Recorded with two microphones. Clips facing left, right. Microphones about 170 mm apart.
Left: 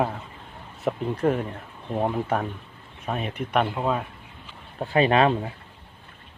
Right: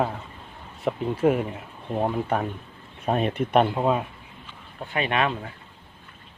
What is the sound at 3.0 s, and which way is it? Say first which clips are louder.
Speech: right 6 dB; 35° right (ahead or behind).